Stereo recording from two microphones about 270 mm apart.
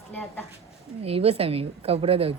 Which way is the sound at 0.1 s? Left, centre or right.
Centre.